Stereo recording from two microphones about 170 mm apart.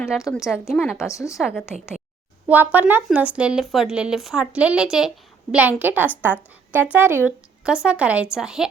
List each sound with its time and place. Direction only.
0.3 s speech: 5° right (ahead or behind)
1.1 s a woman's voice: 20° left (ahead or behind)
1.4 s speech: 5° right (ahead or behind)
2.7 s speech: 10° right (ahead or behind)